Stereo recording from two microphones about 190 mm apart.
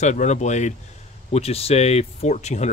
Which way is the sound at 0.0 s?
40° left (ahead or behind).